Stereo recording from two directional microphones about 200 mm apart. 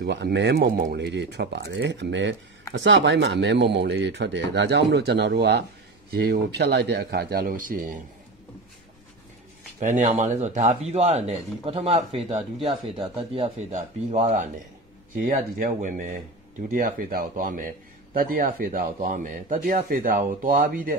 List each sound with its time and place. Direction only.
0.1 s speech: 60° right (ahead or behind)
1.0 s a man's voice: 60° right (ahead or behind); by 8.0 s 40° right (ahead or behind)
9.8 s a man's voice: 35° right (ahead or behind)